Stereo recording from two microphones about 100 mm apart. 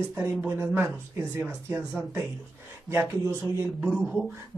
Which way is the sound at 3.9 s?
10° right (ahead or behind).